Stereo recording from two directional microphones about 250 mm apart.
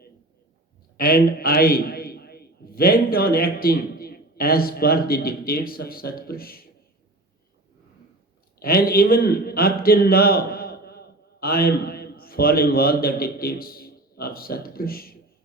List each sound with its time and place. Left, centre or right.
0.9 s a man's voice: left
8.5 s a man's voice: left